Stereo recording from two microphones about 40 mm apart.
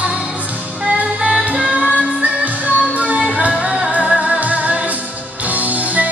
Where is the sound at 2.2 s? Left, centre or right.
Right.